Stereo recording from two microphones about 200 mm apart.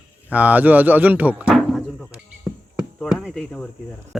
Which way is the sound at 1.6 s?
Centre (ahead or behind).